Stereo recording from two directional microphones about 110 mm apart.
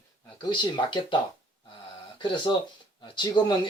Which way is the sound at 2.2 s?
45° left (ahead or behind).